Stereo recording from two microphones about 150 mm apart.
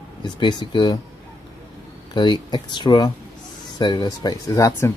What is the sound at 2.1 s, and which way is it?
Speech, 30° left (ahead or behind).